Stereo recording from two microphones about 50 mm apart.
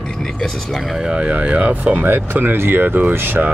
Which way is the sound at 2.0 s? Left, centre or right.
Right.